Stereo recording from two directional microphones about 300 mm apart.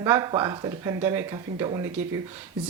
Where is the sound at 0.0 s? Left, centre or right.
Centre.